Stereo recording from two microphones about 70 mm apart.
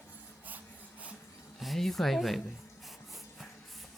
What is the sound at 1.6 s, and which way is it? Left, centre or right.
Speech, centre.